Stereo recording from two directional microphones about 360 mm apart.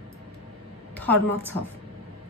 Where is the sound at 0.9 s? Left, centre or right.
Centre.